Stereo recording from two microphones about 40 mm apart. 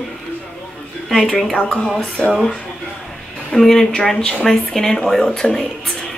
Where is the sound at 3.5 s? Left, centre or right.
Centre.